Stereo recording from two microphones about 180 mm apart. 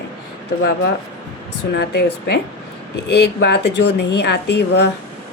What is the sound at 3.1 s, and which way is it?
A woman's voice, 70° left (ahead or behind).